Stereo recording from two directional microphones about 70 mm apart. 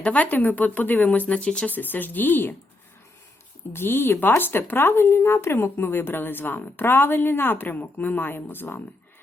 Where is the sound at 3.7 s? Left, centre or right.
Left.